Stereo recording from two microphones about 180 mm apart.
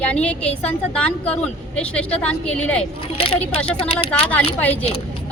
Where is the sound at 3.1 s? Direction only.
30° left (ahead or behind).